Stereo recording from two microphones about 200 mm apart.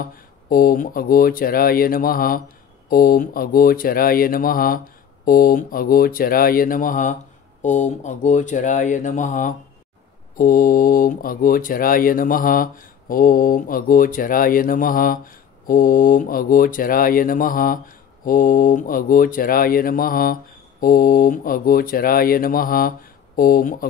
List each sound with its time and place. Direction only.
0.0 s speech: 45° left (ahead or behind)